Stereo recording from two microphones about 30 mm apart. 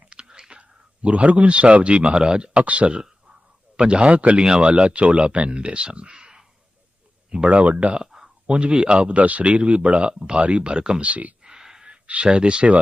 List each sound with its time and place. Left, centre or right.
0.1 s whispering: right
0.6 s speech: right
2.2 s speech: right
2.6 s speech: right
3.8 s speech: right
4.4 s speech: right
7.4 s speech: right
8.0 s a sound: centre
8.4 s speech: right
9.1 s speech: right
11.0 s speech: right
11.4 s a sound: right
11.9 s a sound: right
12.2 s speech: right